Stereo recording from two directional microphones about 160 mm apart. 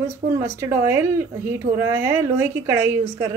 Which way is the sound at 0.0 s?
15° right (ahead or behind).